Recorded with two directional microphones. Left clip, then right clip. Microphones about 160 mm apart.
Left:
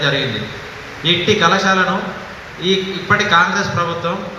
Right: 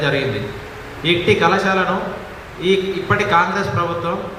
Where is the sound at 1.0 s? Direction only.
30° right (ahead or behind).